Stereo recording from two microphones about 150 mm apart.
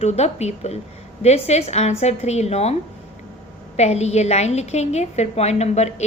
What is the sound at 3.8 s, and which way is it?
A woman's voice, 45° left (ahead or behind).